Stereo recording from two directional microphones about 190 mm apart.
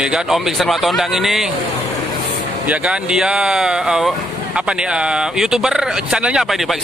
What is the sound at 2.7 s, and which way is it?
Speech, 5° right (ahead or behind).